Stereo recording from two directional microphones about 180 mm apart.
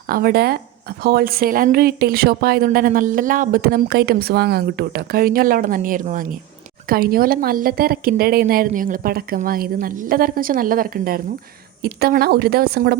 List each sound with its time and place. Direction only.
0.1 s speech: 55° right (ahead or behind)